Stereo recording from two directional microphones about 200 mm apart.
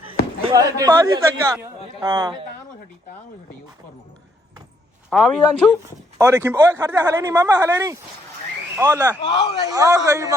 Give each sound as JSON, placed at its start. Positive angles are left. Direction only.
{"t": 0.5, "sound": "speech", "side_deg": -15}
{"t": 5.0, "sound": "a man's voice", "side_deg": -5}
{"t": 9.2, "sound": "a man's voice", "side_deg": 25}
{"t": 9.7, "sound": "speech", "side_deg": -15}